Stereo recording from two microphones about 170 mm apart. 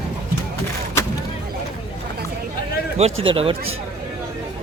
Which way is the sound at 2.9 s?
35° right (ahead or behind).